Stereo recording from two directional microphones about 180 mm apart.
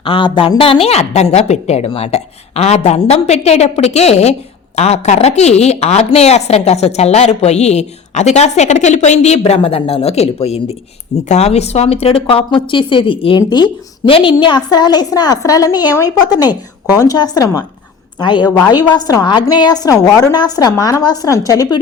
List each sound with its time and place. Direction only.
0.0 s a woman's voice: 30° left (ahead or behind)